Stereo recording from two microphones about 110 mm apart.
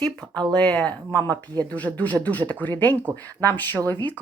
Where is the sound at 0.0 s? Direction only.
10° left (ahead or behind).